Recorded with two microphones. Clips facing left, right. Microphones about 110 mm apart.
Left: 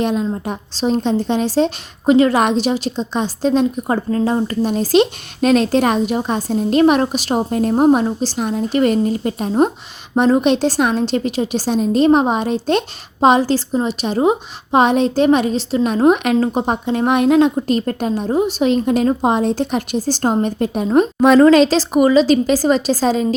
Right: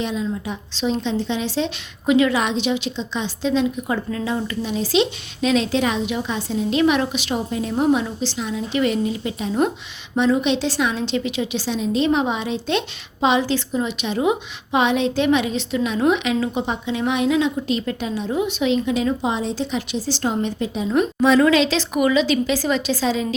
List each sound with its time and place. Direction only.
0.0 s a woman's voice: 50° left (ahead or behind)